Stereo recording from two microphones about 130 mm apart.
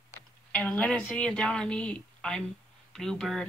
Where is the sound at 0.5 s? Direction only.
10° left (ahead or behind).